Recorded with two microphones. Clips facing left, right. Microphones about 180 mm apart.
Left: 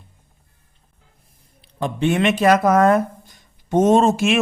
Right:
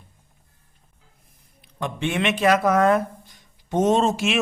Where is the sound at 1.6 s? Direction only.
35° left (ahead or behind).